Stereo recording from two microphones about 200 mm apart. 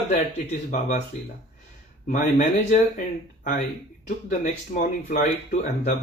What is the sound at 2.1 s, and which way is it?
Speech, 40° left (ahead or behind).